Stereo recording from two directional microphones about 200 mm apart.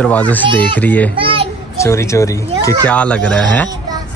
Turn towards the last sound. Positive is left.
turn(degrees=5)  # may be behind; listen again after turning